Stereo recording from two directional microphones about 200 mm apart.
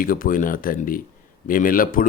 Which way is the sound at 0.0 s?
45° left (ahead or behind).